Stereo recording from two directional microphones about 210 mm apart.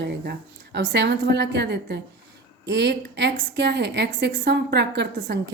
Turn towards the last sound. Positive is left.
turn(degrees=-55)  # may be behind; listen again after turning